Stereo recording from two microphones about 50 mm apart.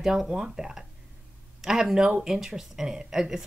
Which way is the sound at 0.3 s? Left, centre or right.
Centre.